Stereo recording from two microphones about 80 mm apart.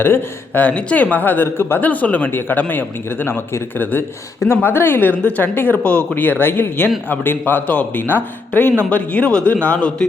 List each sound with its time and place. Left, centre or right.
0.0 s speech: left